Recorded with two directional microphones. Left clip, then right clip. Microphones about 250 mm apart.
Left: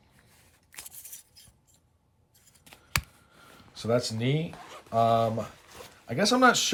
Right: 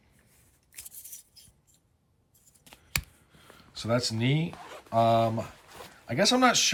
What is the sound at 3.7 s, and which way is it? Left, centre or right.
Speech, centre.